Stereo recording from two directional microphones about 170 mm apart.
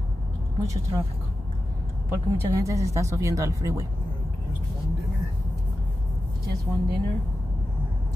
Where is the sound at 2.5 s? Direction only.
20° right (ahead or behind).